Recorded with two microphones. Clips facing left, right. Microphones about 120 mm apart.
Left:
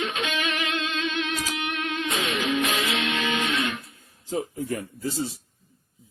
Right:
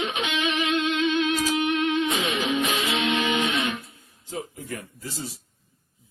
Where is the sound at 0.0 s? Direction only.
20° right (ahead or behind).